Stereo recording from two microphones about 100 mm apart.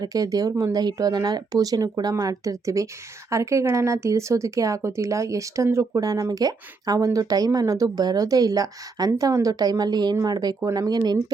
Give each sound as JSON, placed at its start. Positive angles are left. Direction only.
{"t": 0.0, "sound": "speech", "side_deg": -35}